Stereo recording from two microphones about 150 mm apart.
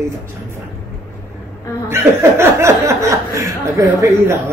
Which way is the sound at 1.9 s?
15° right (ahead or behind).